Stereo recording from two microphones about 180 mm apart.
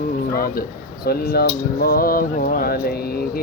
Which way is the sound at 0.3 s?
55° left (ahead or behind).